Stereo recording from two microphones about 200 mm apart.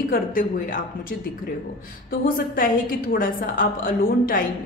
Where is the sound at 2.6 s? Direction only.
45° left (ahead or behind).